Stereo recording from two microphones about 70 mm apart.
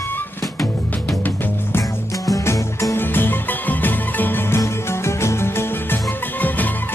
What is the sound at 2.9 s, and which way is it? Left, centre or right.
Music, left.